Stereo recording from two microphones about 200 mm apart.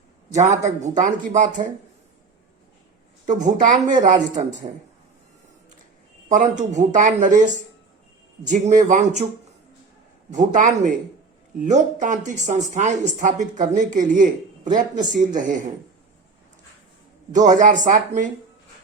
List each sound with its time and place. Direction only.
0.3 s speech: 35° right (ahead or behind)
3.2 s speech: 40° right (ahead or behind)
6.2 s speech: 40° right (ahead or behind)
8.4 s speech: 40° right (ahead or behind)
10.3 s speech: 40° right (ahead or behind)
17.3 s speech: 40° right (ahead or behind)